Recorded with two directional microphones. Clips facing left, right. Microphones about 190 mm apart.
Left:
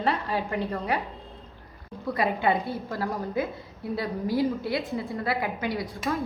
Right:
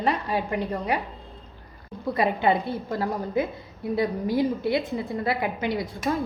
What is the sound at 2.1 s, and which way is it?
A woman's voice, 25° right (ahead or behind).